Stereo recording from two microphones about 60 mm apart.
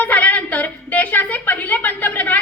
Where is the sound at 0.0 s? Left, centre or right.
Left.